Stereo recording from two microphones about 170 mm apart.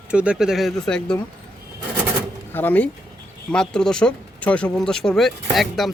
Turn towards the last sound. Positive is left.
turn(degrees=0)  # may be behind; listen again after turning